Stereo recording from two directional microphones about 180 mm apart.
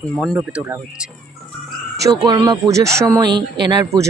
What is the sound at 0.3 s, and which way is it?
Speech, 15° right (ahead or behind).